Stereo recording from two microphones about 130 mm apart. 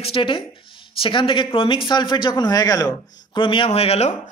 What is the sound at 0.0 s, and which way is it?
A man's voice, 45° left (ahead or behind).